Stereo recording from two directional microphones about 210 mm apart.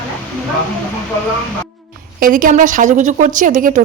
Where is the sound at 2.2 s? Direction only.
40° right (ahead or behind).